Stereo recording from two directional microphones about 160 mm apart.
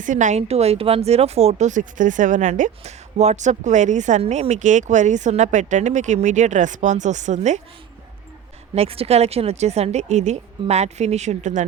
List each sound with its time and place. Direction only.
0.0 s speech: 50° right (ahead or behind)
8.7 s speech: 40° right (ahead or behind)